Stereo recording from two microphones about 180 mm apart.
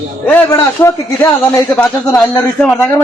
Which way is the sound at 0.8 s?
15° left (ahead or behind).